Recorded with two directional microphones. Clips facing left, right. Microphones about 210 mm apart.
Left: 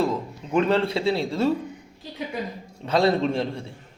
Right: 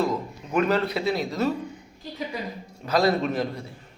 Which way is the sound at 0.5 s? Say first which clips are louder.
Left 2 dB; 30° left (ahead or behind).